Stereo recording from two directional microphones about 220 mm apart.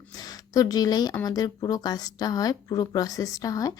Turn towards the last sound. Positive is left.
turn(degrees=15)  # may be behind; listen again after turning